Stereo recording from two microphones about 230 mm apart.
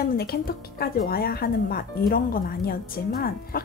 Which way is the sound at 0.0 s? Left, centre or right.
Left.